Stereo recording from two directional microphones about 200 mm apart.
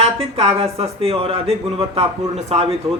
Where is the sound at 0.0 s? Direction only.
30° right (ahead or behind).